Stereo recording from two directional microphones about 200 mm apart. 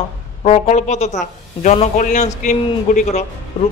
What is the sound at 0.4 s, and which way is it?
Speech, 35° left (ahead or behind).